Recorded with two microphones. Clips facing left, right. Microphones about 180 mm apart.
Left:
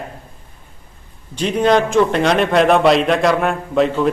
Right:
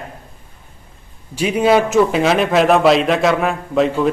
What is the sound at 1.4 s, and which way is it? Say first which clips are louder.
A man's voice: right 1 dB; 5° right (ahead or behind).